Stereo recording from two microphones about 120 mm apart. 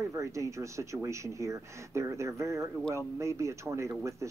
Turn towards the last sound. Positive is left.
turn(degrees=-25)  # may be behind; listen again after turning